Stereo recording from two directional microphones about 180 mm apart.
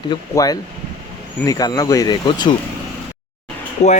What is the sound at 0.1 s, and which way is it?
Speech, 20° left (ahead or behind).